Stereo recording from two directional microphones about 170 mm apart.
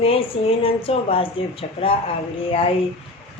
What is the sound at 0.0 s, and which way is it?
Speech, 35° left (ahead or behind).